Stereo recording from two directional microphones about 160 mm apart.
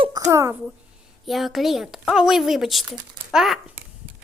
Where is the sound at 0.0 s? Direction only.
25° right (ahead or behind).